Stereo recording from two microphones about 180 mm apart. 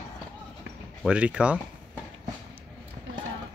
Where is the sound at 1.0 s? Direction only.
5° right (ahead or behind).